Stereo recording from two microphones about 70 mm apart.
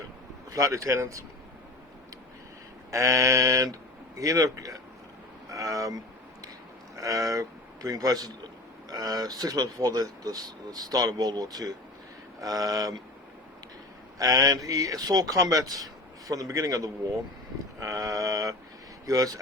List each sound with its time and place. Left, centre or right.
0.5 s mantra: right
2.9 s mantra: right
4.2 s a man's voice: right
14.2 s speech: right
17.7 s mantra: right
19.0 s speech: right